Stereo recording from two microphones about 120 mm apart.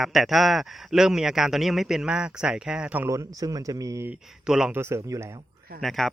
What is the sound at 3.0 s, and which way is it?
A man's voice, 25° right (ahead or behind).